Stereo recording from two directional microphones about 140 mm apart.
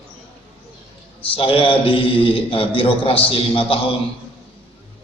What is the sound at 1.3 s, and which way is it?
A man's voice, 40° left (ahead or behind).